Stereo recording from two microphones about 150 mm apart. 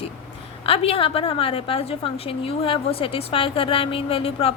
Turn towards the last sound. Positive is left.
turn(degrees=40)  # may be behind; listen again after turning